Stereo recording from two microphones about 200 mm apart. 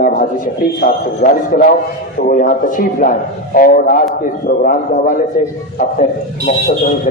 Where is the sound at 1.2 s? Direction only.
45° left (ahead or behind).